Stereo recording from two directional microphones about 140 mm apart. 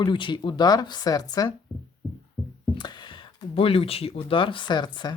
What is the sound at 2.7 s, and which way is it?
Speech, 30° left (ahead or behind).